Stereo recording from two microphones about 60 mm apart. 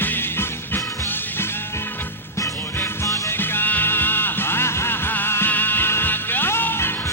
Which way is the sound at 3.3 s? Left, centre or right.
Left.